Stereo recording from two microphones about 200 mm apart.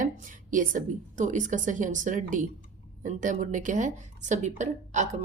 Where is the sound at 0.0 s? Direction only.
40° right (ahead or behind).